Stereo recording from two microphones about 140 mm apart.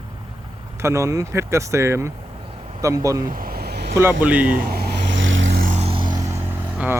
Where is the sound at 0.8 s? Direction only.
20° right (ahead or behind).